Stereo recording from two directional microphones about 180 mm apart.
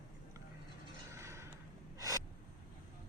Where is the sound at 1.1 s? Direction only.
15° right (ahead or behind).